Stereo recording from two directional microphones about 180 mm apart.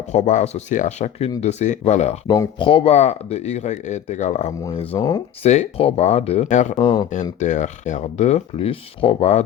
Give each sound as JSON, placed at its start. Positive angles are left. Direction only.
{"t": 0.1, "sound": "speech", "side_deg": 40}
{"t": 2.2, "sound": "speech", "side_deg": 20}
{"t": 4.9, "sound": "speech", "side_deg": 20}
{"t": 5.4, "sound": "speech", "side_deg": 35}